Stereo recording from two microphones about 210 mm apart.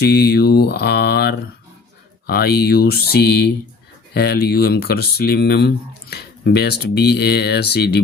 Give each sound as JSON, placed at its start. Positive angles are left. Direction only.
{"t": 0.0, "sound": "speech", "side_deg": 50}